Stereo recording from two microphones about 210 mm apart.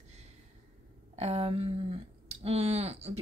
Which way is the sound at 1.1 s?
30° right (ahead or behind).